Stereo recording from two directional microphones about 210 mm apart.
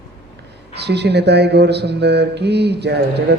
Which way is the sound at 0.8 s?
55° right (ahead or behind).